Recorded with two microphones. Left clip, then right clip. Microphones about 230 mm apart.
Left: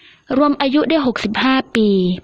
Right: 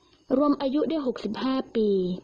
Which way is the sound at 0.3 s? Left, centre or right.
Left.